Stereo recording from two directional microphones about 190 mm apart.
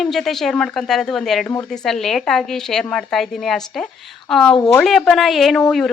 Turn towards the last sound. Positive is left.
turn(degrees=0)  # may be behind; listen again after turning